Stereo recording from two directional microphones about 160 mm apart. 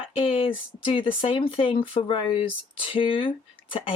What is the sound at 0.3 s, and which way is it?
Speech, 35° left (ahead or behind).